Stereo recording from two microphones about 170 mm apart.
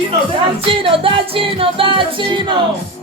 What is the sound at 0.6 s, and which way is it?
Music, 30° right (ahead or behind).